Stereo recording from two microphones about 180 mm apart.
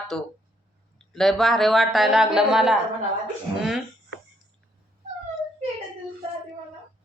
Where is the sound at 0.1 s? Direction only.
Centre (ahead or behind).